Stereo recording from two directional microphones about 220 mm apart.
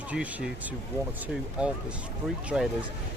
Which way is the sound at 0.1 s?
5° right (ahead or behind).